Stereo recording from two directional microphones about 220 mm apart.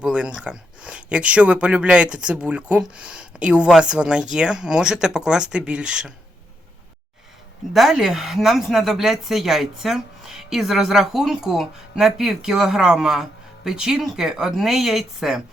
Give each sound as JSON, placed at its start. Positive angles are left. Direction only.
{"t": 0.0, "sound": "speech", "side_deg": -5}
{"t": 7.7, "sound": "speech", "side_deg": 0}